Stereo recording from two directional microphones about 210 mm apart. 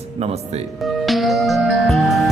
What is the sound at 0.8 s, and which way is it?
Music, centre (ahead or behind).